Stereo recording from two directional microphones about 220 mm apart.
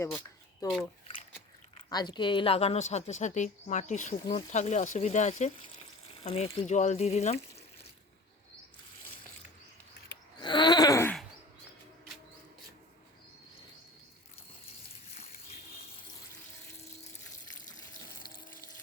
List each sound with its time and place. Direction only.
1.9 s a woman's voice: 20° left (ahead or behind)
10.4 s wail: 20° left (ahead or behind)
16.7 s a sound: 30° left (ahead or behind)
17.7 s water: 40° left (ahead or behind)